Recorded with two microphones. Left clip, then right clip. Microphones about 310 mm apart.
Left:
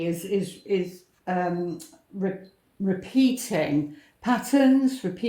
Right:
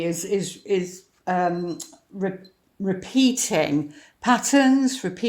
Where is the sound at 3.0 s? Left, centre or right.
Right.